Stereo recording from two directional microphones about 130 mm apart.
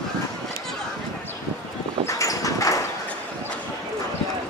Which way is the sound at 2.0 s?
25° left (ahead or behind).